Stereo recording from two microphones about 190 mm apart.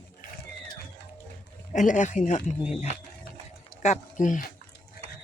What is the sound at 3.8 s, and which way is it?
Speech, 40° left (ahead or behind).